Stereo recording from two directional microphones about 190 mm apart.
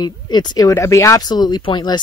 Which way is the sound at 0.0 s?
20° left (ahead or behind).